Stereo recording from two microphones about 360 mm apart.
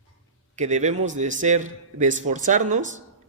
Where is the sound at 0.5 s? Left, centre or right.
Centre.